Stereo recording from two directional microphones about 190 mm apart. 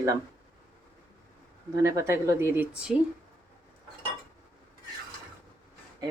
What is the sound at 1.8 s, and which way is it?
Speech, 15° right (ahead or behind).